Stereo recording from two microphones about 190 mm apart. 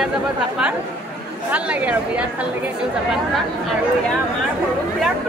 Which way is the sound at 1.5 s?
5° right (ahead or behind).